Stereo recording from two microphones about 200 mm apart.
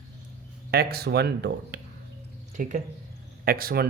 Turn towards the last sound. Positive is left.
turn(degrees=-50)  # may be behind; listen again after turning